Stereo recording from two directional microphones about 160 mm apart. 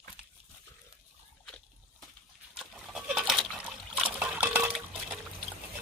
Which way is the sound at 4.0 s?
10° right (ahead or behind).